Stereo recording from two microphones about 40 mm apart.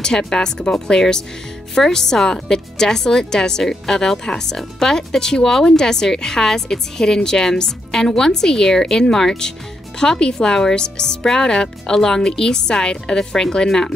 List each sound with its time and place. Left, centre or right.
0.2 s speech: centre